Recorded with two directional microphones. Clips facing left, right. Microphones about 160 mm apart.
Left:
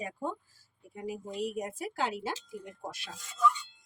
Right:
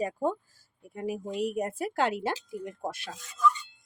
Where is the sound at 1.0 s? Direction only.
65° right (ahead or behind).